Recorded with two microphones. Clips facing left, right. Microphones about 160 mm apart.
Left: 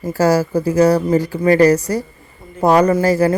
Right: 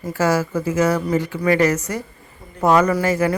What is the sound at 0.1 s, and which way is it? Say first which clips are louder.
Speech: left 4 dB; 35° left (ahead or behind).